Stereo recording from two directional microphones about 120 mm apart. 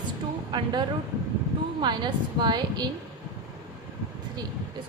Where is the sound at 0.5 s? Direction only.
40° right (ahead or behind).